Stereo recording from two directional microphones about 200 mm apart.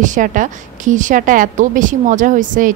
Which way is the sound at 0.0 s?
40° right (ahead or behind).